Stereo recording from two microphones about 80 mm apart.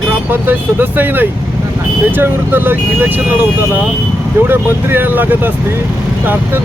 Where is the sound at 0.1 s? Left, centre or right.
Right.